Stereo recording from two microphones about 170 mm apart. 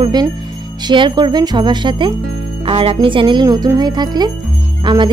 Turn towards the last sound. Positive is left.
turn(degrees=-25)  # may be behind; listen again after turning